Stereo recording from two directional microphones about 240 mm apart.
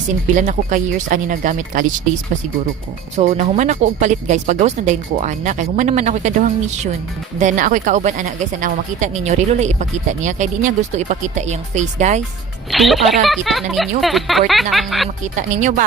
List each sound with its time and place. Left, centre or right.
0.3 s speech: right
3.2 s speech: right
7.3 s speech: right
12.7 s speech: centre
15.2 s speech: right